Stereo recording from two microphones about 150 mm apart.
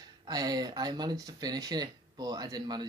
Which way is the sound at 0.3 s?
25° right (ahead or behind).